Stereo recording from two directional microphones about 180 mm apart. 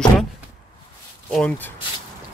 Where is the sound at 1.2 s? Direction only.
5° left (ahead or behind).